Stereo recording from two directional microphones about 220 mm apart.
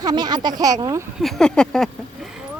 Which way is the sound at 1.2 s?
Centre (ahead or behind).